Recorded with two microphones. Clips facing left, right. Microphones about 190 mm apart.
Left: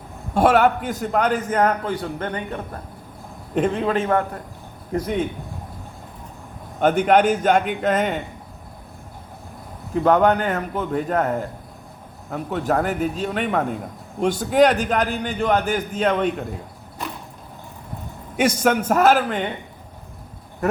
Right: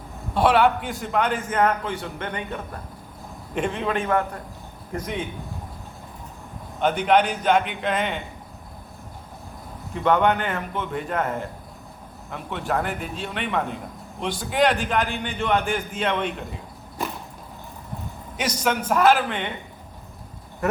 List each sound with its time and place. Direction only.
0.3 s a man's voice: 45° left (ahead or behind)
6.7 s a man's voice: 45° left (ahead or behind)
9.9 s a man's voice: 40° left (ahead or behind)
18.3 s a man's voice: 50° left (ahead or behind)